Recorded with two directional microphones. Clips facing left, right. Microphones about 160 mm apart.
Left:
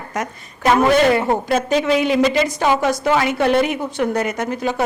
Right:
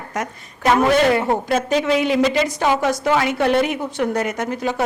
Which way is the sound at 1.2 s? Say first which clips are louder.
Left 1 dB; 25° left (ahead or behind).